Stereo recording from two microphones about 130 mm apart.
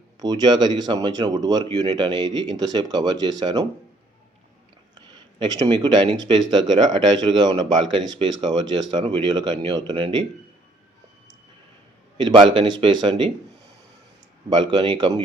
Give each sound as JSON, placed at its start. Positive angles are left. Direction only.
{"t": 0.2, "sound": "speech", "side_deg": -35}
{"t": 4.9, "sound": "speech", "side_deg": -35}
{"t": 12.1, "sound": "speech", "side_deg": -40}
{"t": 14.5, "sound": "speech", "side_deg": -35}